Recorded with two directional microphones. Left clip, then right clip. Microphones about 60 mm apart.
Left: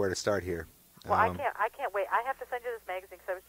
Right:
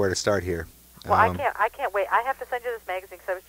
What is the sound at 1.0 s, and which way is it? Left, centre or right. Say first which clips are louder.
Speech: right 7 dB; right.